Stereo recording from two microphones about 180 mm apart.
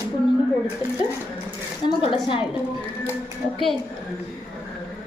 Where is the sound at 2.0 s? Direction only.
30° left (ahead or behind).